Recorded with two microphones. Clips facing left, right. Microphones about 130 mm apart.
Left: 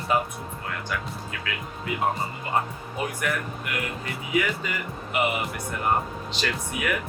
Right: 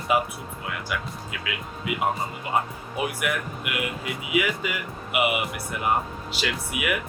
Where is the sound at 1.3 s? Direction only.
5° right (ahead or behind).